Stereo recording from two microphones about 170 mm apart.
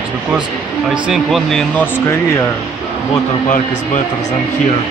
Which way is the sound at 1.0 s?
Centre (ahead or behind).